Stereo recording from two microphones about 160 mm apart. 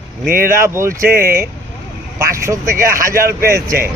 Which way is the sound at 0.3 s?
60° right (ahead or behind).